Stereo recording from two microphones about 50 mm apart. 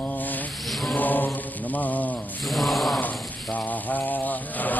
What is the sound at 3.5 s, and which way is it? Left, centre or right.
Mantra, left.